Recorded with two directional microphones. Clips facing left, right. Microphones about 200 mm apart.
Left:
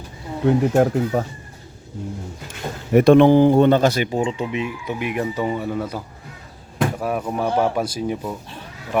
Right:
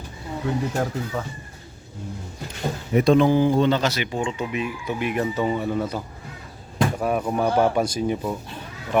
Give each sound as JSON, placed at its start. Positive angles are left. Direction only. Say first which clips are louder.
{"t": 0.4, "sound": "speech", "louder": "left 9 dB", "side_deg": 45}
{"t": 2.9, "sound": "speech", "louder": "left 6 dB", "side_deg": 60}
{"t": 7.0, "sound": "speech", "louder": "right 1 dB", "side_deg": 0}